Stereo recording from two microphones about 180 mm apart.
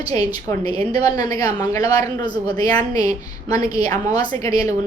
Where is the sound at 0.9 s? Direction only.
20° left (ahead or behind).